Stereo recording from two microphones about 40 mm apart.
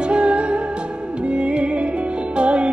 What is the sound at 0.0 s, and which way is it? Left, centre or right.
Music, right.